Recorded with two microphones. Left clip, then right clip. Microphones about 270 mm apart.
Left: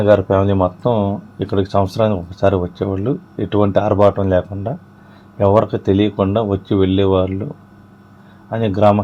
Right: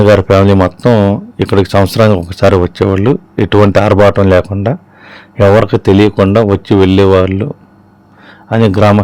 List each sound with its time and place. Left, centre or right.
0.1 s speech: right
8.4 s speech: right